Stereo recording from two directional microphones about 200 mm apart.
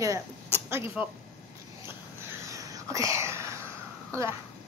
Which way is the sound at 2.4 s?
15° right (ahead or behind).